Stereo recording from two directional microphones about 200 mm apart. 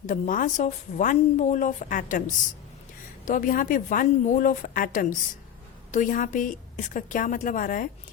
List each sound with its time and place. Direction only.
0.1 s a woman's voice: 40° left (ahead or behind)